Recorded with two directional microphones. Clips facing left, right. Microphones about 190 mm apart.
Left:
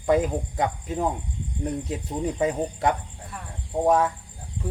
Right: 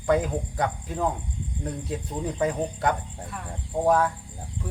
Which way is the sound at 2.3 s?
25° left (ahead or behind).